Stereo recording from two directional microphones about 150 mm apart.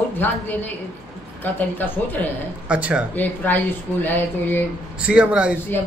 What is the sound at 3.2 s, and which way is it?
A woman's voice, 10° left (ahead or behind).